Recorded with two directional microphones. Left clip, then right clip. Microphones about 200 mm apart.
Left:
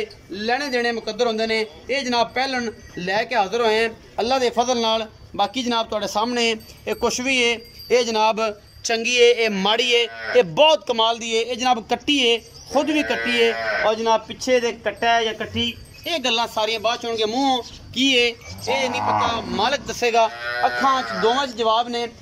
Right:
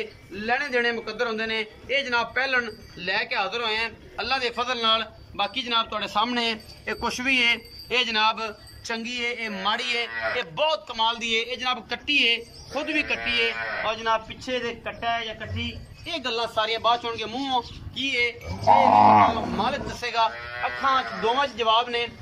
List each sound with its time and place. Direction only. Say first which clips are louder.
0.3 s a man's voice: left 2 dB; 20° left (ahead or behind)
8.0 s a man's voice: even; 35° left (ahead or behind); by 18.9 s 50° left (ahead or behind)
18.9 s speech: right 7 dB; 50° right (ahead or behind)
19.2 s speech: left 2 dB; 55° left (ahead or behind)
20.6 s a man's voice: left 4 dB; 30° left (ahead or behind)